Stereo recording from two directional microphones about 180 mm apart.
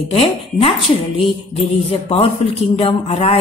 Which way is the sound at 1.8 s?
30° left (ahead or behind).